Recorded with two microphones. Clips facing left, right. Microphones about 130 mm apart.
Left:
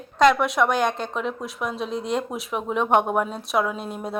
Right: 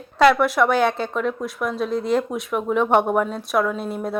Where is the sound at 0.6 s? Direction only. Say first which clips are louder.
Right 3 dB; 15° left (ahead or behind).